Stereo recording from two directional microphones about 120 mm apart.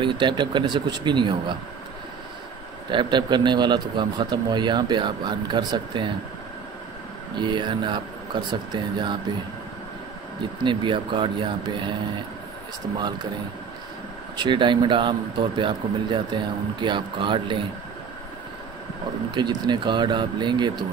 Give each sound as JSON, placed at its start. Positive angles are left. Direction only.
{"t": 0.0, "sound": "speech", "side_deg": -40}
{"t": 2.9, "sound": "speech", "side_deg": -40}
{"t": 7.3, "sound": "speech", "side_deg": -40}
{"t": 10.6, "sound": "speech", "side_deg": -40}
{"t": 14.3, "sound": "speech", "side_deg": -40}
{"t": 19.3, "sound": "speech", "side_deg": -35}